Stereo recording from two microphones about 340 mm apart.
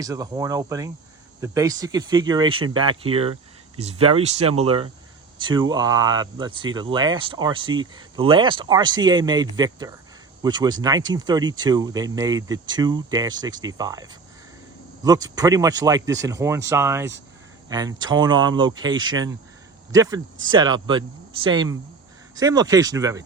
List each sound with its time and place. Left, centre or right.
0.0 s speech: centre